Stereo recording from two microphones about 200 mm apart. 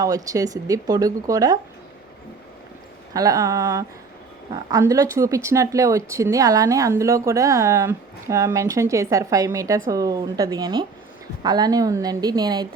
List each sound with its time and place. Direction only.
0.0 s speech: 15° right (ahead or behind)
3.1 s a woman's voice: 20° right (ahead or behind)